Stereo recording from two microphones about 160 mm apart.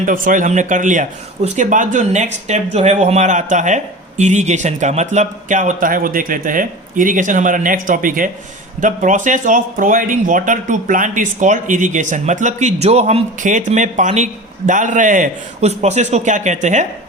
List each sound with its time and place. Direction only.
0.0 s speech: 55° right (ahead or behind)